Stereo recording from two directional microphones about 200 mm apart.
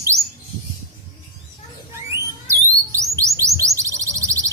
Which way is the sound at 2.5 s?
15° right (ahead or behind).